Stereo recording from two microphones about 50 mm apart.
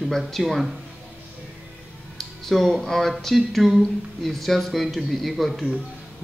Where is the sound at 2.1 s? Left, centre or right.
Centre.